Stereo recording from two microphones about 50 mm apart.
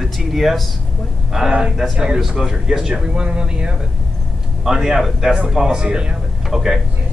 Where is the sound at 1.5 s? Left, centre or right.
Centre.